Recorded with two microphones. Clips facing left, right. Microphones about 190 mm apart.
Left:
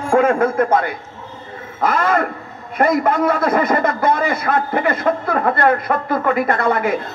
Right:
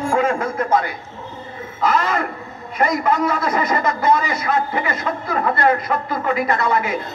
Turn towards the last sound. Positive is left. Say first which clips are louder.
# left 2 dB
turn(degrees=55)  # may be behind; listen again after turning